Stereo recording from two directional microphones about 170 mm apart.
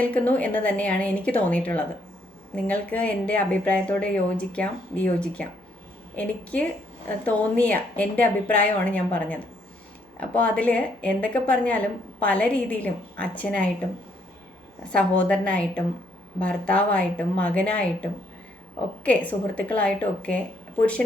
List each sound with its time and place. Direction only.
0.0 s speech: 10° left (ahead or behind)
14.9 s speech: 10° left (ahead or behind)